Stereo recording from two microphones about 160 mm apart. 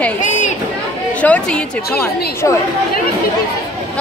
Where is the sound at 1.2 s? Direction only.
10° left (ahead or behind).